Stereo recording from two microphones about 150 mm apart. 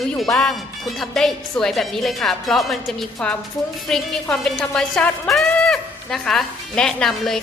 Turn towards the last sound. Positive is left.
turn(degrees=5)  # may be behind; listen again after turning